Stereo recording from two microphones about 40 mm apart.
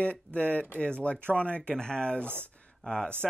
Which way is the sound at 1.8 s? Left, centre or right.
Centre.